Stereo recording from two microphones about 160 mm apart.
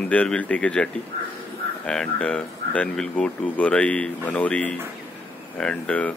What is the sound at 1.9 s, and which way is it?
Speech, 5° left (ahead or behind).